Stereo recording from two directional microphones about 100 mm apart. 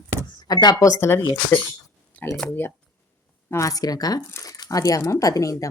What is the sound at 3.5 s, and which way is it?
Speech, 35° left (ahead or behind).